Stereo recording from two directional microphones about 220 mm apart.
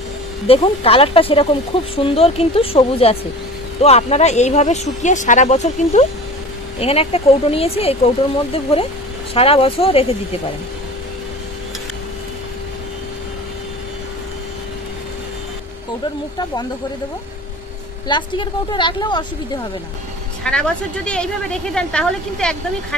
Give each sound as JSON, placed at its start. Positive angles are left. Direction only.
{"t": 0.5, "sound": "speech", "side_deg": 25}
{"t": 18.0, "sound": "speech", "side_deg": 20}
{"t": 20.4, "sound": "a woman's voice", "side_deg": 5}